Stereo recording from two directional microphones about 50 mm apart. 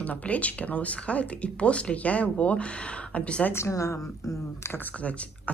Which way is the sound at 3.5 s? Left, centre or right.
Left.